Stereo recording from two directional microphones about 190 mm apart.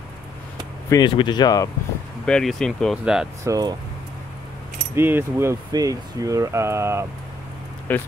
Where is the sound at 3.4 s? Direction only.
20° right (ahead or behind).